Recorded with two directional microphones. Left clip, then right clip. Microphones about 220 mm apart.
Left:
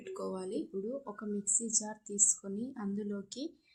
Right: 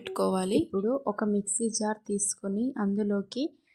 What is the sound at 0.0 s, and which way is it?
Speech, 40° right (ahead or behind).